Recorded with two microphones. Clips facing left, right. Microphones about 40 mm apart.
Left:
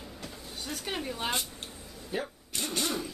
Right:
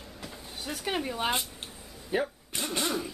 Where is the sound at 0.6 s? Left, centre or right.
Centre.